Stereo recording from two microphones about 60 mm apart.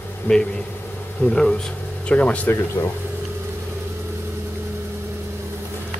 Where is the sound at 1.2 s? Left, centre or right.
Left.